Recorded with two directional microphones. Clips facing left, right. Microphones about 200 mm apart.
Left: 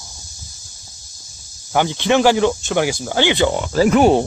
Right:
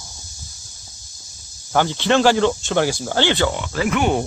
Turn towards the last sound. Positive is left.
turn(degrees=35)  # may be behind; listen again after turning